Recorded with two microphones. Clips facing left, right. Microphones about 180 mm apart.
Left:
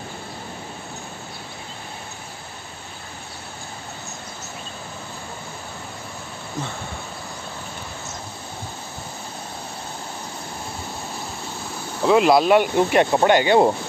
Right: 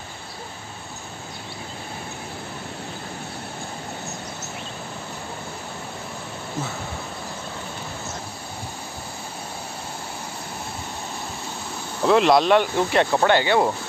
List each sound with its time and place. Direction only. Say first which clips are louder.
12.0 s speech: left 1 dB; 5° left (ahead or behind); by 13.7 s 25° left (ahead or behind)